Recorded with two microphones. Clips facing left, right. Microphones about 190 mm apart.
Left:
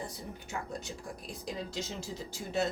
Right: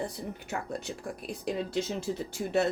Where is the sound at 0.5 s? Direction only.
60° right (ahead or behind).